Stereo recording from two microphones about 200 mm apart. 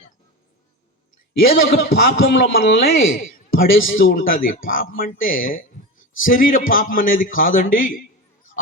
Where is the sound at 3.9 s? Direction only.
40° left (ahead or behind).